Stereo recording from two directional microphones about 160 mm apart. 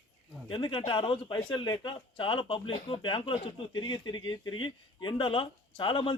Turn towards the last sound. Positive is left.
turn(degrees=35)  # may be behind; listen again after turning